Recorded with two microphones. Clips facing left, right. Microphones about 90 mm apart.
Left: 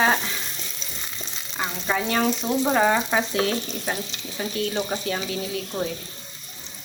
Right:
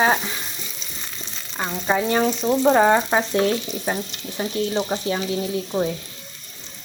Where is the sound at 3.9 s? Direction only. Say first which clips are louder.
Right 4 dB; 15° right (ahead or behind).